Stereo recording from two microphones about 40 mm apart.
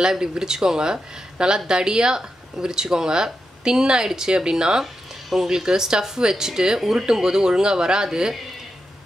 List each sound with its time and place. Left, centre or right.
0.0 s speech: centre